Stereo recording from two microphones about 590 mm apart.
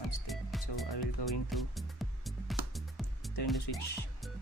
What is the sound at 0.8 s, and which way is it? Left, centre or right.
Speech, left.